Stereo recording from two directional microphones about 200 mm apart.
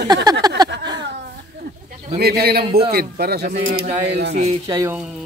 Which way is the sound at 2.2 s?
50° right (ahead or behind).